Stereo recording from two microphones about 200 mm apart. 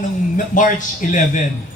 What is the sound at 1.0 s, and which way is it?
Speech, 40° left (ahead or behind).